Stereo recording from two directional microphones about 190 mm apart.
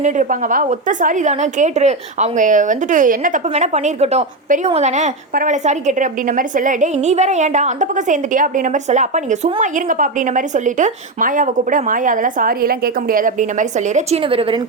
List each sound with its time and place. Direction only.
0.0 s a woman's voice: 40° right (ahead or behind)